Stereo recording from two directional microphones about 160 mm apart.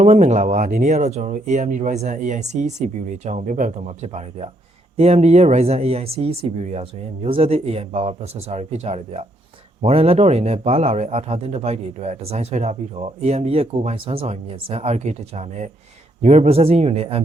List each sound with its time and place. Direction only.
0.0 s speech: 45° right (ahead or behind)